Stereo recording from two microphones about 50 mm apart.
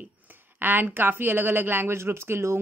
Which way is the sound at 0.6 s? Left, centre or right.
Right.